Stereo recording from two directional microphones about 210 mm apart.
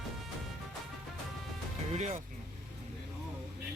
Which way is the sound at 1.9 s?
35° right (ahead or behind).